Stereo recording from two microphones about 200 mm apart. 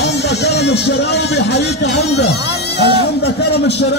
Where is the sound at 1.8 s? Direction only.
60° left (ahead or behind).